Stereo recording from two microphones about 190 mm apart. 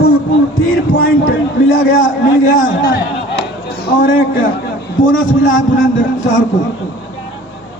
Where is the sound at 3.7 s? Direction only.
60° left (ahead or behind).